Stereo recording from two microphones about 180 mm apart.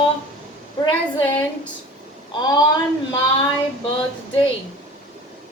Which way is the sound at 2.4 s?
25° left (ahead or behind).